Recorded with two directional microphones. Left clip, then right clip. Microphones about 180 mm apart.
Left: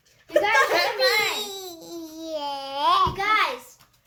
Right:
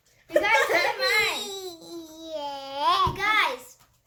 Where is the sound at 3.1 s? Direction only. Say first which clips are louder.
Left 1 dB; 40° right (ahead or behind).